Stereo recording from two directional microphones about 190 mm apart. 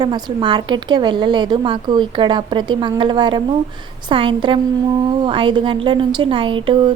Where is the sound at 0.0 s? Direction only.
20° right (ahead or behind).